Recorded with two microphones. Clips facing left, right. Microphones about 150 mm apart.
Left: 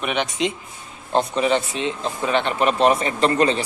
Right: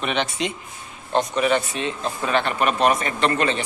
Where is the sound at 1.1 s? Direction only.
25° left (ahead or behind).